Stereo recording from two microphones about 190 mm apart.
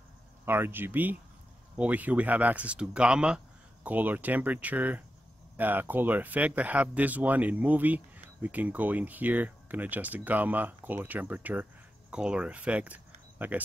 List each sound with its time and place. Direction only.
0.5 s speech: 10° right (ahead or behind)